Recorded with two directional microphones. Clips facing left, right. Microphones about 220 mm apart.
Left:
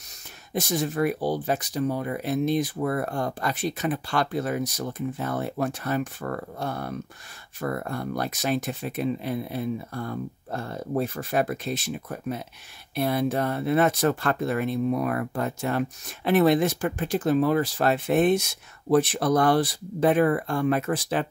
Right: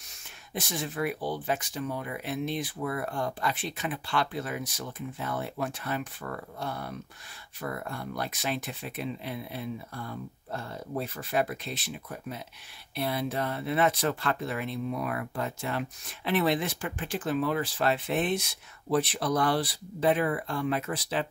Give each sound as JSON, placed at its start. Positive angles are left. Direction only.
{"t": 0.5, "sound": "speech", "side_deg": 40}